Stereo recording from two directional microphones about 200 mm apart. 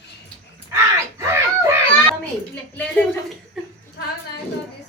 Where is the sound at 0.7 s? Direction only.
15° right (ahead or behind).